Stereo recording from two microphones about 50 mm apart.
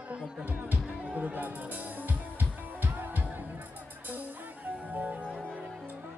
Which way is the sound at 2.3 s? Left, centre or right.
Right.